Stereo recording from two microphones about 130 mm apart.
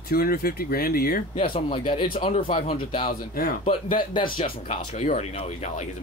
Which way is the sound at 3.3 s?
90° left.